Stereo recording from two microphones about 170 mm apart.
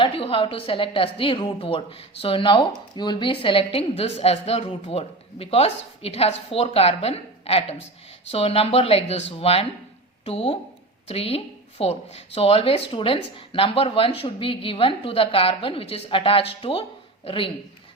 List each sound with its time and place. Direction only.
0.0 s a woman's voice: 35° left (ahead or behind)